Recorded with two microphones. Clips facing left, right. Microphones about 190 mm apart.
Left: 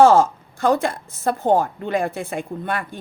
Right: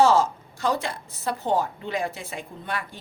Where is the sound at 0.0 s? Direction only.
50° left (ahead or behind).